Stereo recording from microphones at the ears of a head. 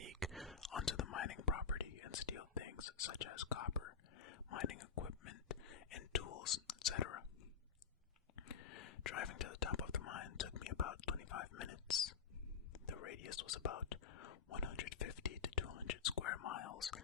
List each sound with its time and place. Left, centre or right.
0.3 s whispering: centre
0.7 s whispering: left
8.4 s whispering: left